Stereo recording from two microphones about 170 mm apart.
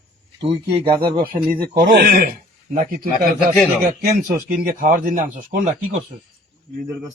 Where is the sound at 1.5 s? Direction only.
60° right (ahead or behind).